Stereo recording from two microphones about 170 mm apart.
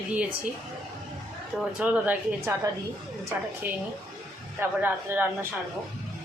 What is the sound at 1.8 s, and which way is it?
Speech, 10° right (ahead or behind).